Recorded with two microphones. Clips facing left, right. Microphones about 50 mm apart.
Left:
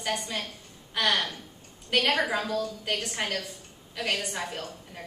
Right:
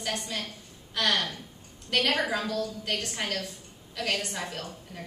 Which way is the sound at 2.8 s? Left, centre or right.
Centre.